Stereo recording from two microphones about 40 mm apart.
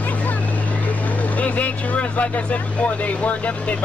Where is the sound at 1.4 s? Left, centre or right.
Left.